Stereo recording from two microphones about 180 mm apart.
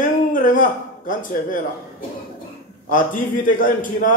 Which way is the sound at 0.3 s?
50° left (ahead or behind).